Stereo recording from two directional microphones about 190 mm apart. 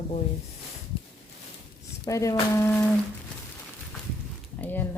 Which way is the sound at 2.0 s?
15° left (ahead or behind).